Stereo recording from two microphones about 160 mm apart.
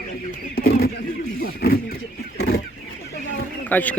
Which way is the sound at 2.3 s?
75° left (ahead or behind).